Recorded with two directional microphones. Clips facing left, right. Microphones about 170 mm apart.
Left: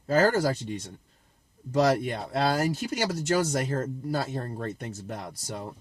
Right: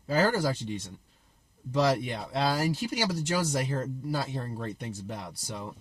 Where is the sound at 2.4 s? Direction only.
55° left (ahead or behind).